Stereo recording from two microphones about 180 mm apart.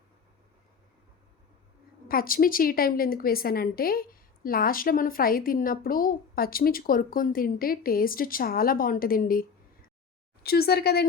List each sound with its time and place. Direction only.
2.0 s a woman's voice: 55° left (ahead or behind)